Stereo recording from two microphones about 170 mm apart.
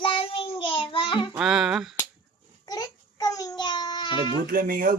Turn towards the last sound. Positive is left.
turn(degrees=-55)  # may be behind; listen again after turning